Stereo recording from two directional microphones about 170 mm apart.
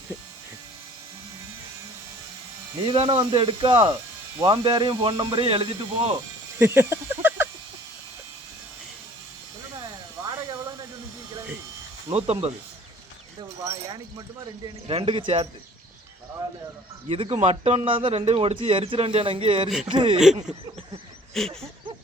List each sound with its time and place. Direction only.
3.2 s speech: 30° right (ahead or behind)
6.6 s speech: 15° right (ahead or behind)
9.7 s a sound: 20° right (ahead or behind)
12.1 s speech: 35° right (ahead or behind)
13.4 s speech: 20° right (ahead or behind)
14.8 s speech: 30° right (ahead or behind)
17.1 s speech: 35° right (ahead or behind)
21.4 s a sound: centre (ahead or behind)